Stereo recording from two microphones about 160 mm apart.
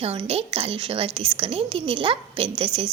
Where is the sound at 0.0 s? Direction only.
40° right (ahead or behind).